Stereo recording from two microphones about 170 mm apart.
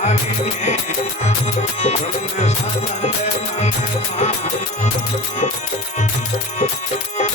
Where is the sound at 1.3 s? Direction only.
40° left (ahead or behind).